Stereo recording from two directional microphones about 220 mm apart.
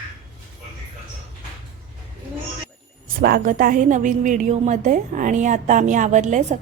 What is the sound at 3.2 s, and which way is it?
A woman's voice, 40° right (ahead or behind).